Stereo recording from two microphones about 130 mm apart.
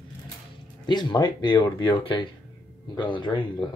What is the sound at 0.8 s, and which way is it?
Speech, 35° left (ahead or behind).